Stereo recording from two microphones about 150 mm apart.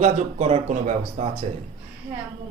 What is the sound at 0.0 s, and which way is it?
A man's voice, 50° right (ahead or behind).